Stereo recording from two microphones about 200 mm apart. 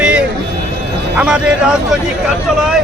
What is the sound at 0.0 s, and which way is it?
Vehicle, 5° right (ahead or behind).